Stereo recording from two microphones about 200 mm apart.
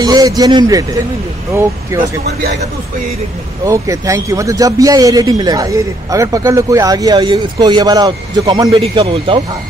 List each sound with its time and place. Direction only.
0.0 s a man's voice: 20° right (ahead or behind)
3.6 s a man's voice: 15° right (ahead or behind)